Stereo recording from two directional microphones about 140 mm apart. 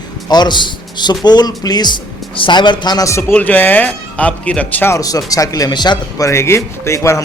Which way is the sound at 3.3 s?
10° left (ahead or behind).